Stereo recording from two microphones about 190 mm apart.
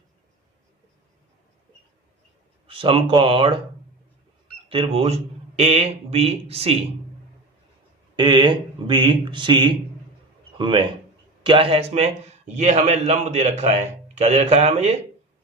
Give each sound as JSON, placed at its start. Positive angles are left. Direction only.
{"t": 2.6, "sound": "speech", "side_deg": -30}
{"t": 4.7, "sound": "a man's voice", "side_deg": -30}
{"t": 8.1, "sound": "a man's voice", "side_deg": -25}